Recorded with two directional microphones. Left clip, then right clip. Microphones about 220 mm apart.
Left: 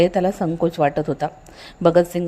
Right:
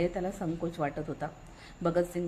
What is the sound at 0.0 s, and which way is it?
A woman's voice, 35° left (ahead or behind).